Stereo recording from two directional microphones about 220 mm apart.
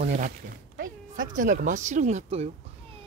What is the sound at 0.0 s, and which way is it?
Speech, 35° right (ahead or behind).